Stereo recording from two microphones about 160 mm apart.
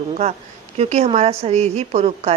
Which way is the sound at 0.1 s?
40° right (ahead or behind).